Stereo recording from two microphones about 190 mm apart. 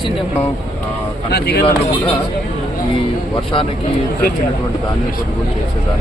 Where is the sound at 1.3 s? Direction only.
60° left (ahead or behind).